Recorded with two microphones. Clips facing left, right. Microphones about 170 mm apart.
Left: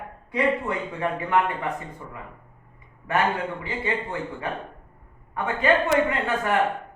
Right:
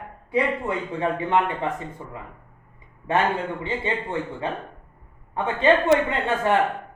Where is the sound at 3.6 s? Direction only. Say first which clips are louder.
Right 1 dB; 25° right (ahead or behind).